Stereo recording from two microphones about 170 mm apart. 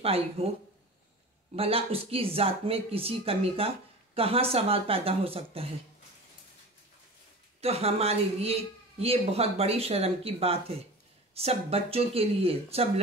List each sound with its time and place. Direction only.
0.0 s speech: 35° right (ahead or behind)
1.5 s speech: 35° right (ahead or behind)
7.6 s speech: 35° right (ahead or behind)